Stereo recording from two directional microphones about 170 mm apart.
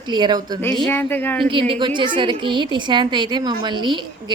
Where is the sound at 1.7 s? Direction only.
30° right (ahead or behind).